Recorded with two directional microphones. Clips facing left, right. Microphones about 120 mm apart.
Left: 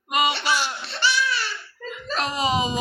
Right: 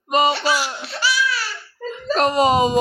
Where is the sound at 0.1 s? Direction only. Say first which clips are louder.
Right 5 dB; 35° right (ahead or behind).